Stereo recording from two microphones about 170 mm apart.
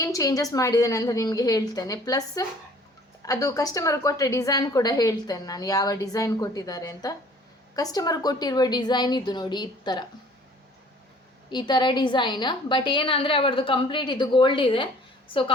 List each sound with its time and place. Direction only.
0.0 s a woman's voice: 20° left (ahead or behind)
11.4 s a woman's voice: 25° left (ahead or behind)